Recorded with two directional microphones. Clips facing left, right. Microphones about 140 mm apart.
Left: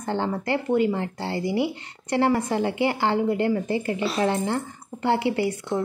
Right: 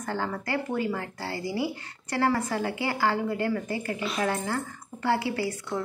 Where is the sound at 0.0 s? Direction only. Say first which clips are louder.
Left 5 dB; 25° left (ahead or behind).